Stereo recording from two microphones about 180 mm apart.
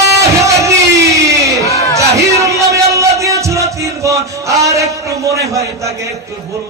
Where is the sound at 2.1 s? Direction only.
15° right (ahead or behind).